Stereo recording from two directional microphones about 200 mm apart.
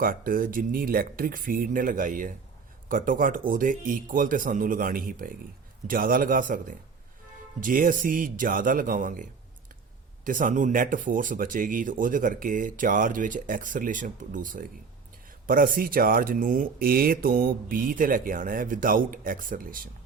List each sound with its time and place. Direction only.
0.0 s speech: 45° right (ahead or behind)
10.2 s speech: 40° right (ahead or behind)